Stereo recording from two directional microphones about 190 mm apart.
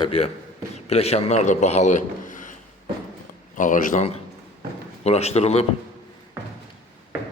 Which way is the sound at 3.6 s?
40° left (ahead or behind).